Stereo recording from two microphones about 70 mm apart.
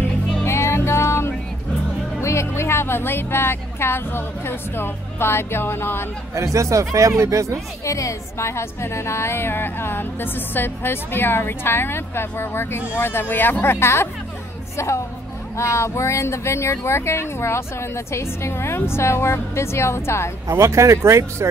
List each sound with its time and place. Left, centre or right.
0.4 s music: left
2.1 s speech: left
6.3 s speech: right
7.8 s a woman's voice: left
20.4 s speech: right